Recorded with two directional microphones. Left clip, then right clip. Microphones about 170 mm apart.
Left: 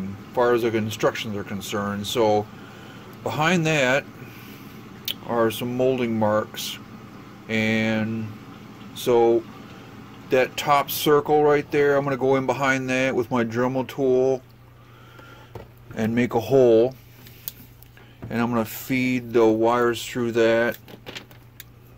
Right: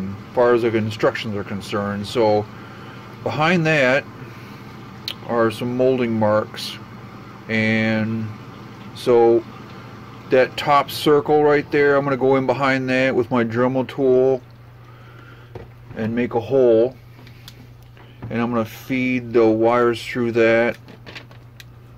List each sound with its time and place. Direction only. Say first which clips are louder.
0.3 s speech: right 4 dB; 5° left (ahead or behind)
5.0 s speech: right 3 dB; 10° left (ahead or behind)
16.0 s speech: right 1 dB; 35° left (ahead or behind)
18.3 s speech: right 2 dB; 15° left (ahead or behind)
19.3 s speech: right 3 dB; 5° left (ahead or behind)